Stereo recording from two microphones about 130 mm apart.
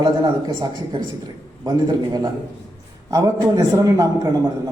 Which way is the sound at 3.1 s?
25° right (ahead or behind).